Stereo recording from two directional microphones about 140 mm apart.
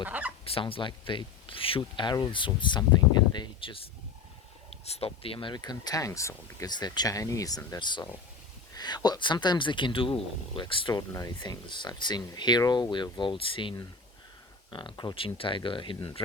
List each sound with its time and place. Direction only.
0.0 s a sound: 10° right (ahead or behind)
0.4 s speech: 40° left (ahead or behind)
4.9 s speech: 45° left (ahead or behind)